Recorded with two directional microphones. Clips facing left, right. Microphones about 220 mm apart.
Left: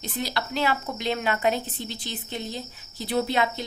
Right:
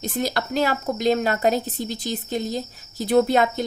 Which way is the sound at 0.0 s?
45° right (ahead or behind).